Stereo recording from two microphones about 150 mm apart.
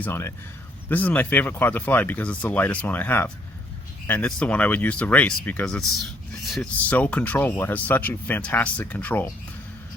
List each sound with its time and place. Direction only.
0.0 s speech: 15° left (ahead or behind); by 6.7 s centre (ahead or behind)
6.9 s speech: 10° left (ahead or behind)